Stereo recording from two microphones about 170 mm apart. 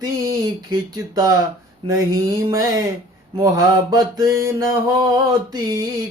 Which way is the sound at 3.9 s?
20° right (ahead or behind).